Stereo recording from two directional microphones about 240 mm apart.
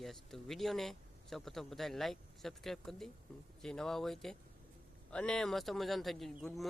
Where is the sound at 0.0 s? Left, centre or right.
Centre.